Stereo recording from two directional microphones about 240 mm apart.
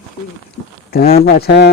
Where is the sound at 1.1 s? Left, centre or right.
Left.